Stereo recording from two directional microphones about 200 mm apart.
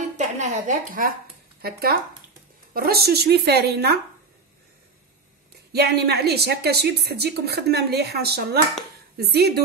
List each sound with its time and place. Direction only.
0.2 s a sound: 35° right (ahead or behind)
1.6 s a woman's voice: 50° right (ahead or behind)
5.7 s a woman's voice: 55° right (ahead or behind)